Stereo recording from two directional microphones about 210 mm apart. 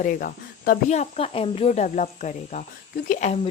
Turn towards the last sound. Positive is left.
turn(degrees=30)  # may be behind; listen again after turning